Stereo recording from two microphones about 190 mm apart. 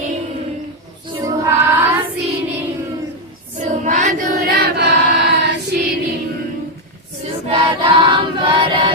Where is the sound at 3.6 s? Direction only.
40° right (ahead or behind).